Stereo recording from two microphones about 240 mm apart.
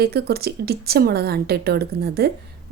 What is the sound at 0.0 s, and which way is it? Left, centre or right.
A woman's voice, right.